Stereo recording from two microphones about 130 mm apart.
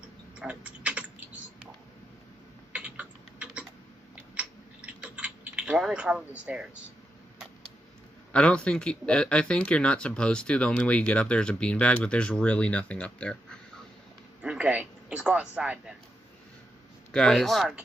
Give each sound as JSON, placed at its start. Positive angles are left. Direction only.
{"t": 0.4, "sound": "typing", "side_deg": -10}
{"t": 2.7, "sound": "typing", "side_deg": -10}
{"t": 8.3, "sound": "speech", "side_deg": 10}
{"t": 14.4, "sound": "a sound", "side_deg": -5}
{"t": 17.1, "sound": "speech", "side_deg": 5}